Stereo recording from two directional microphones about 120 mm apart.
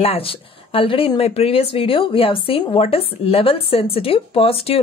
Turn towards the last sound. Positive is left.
turn(degrees=55)  # may be behind; listen again after turning